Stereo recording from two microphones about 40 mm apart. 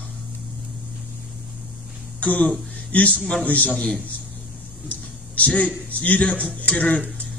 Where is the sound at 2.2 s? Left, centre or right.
Left.